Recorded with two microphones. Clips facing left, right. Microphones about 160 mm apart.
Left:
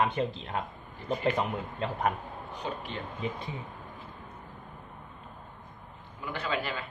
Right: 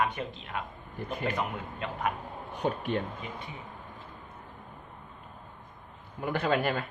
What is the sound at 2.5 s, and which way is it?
Speech, 55° right (ahead or behind).